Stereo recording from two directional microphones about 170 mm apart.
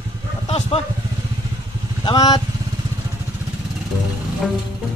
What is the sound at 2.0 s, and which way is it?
Speech, 25° left (ahead or behind).